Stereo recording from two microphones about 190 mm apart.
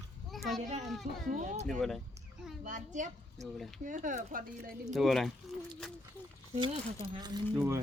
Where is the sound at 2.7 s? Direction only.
40° right (ahead or behind).